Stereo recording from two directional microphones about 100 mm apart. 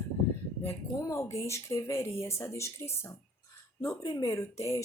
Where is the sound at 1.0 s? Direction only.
30° left (ahead or behind).